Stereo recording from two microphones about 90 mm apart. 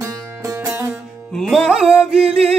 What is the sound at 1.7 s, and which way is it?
Music, 10° right (ahead or behind).